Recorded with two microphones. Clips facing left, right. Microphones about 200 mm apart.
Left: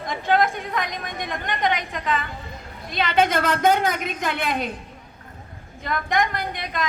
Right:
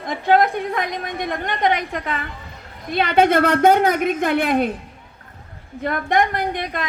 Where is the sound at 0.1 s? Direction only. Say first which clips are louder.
Right 4 dB; 55° right (ahead or behind).